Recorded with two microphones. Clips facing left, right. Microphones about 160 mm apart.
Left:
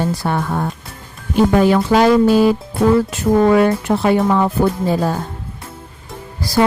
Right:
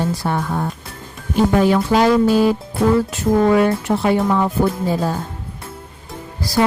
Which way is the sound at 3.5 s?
65° left (ahead or behind).